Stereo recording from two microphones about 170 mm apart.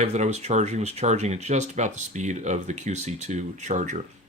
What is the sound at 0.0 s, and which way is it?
Speech, 40° right (ahead or behind).